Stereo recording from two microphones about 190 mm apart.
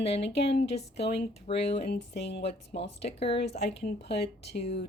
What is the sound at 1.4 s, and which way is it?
Speech, 35° left (ahead or behind).